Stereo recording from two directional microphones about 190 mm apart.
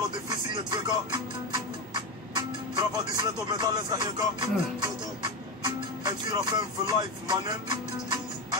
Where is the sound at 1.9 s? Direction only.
25° right (ahead or behind).